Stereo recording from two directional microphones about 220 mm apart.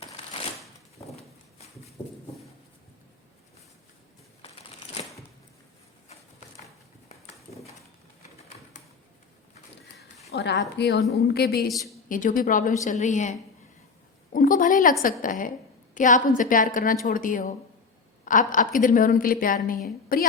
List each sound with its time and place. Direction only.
0.9 s horse: 30° left (ahead or behind)
7.1 s horse: 30° left (ahead or behind)
10.3 s a woman's voice: 50° left (ahead or behind); by 13.3 s 35° left (ahead or behind)
14.3 s a woman's voice: 40° left (ahead or behind)